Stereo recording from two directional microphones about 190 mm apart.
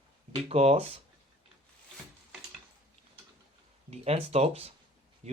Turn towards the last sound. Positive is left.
turn(degrees=-35)  # may be behind; listen again after turning